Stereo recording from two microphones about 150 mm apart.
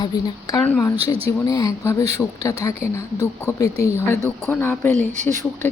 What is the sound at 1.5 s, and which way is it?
Speech, 25° left (ahead or behind).